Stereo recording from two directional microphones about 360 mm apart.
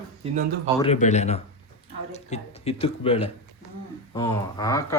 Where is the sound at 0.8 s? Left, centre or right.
Centre.